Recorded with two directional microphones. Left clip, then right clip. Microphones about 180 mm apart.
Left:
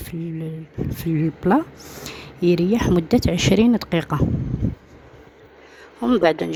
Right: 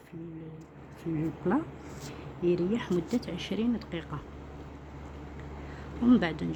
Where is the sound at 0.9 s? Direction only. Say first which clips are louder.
Left 8 dB; 55° left (ahead or behind).